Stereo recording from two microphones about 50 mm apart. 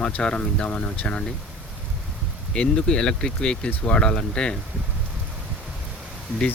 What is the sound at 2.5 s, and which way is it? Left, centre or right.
Speech, centre.